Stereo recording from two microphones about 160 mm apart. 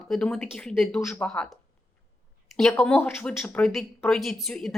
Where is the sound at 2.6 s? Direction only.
Centre (ahead or behind).